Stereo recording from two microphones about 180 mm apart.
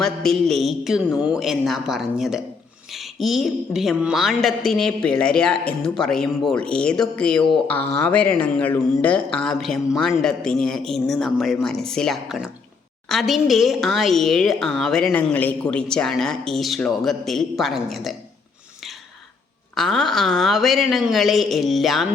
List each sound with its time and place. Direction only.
0.0 s a woman's voice: centre (ahead or behind)
19.7 s a woman's voice: centre (ahead or behind)